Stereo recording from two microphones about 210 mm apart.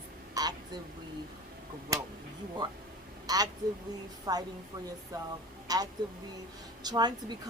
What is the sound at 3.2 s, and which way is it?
A woman's voice, 20° right (ahead or behind).